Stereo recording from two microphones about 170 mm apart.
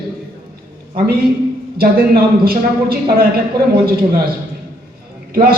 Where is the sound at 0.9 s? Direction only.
60° right (ahead or behind).